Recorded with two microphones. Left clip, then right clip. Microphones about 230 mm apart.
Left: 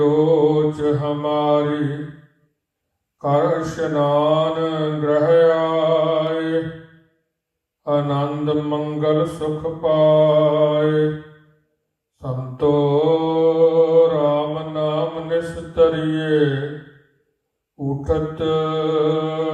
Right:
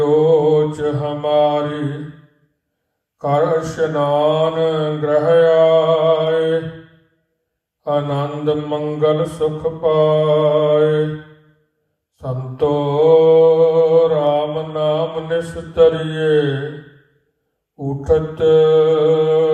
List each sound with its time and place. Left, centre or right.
0.0 s mantra: right
3.2 s mantra: right
7.9 s mantra: right
12.2 s mantra: right
17.7 s mantra: right